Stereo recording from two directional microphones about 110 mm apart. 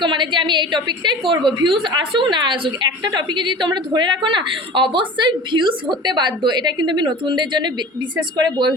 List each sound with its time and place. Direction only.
0.0 s a woman's voice: 45° right (ahead or behind)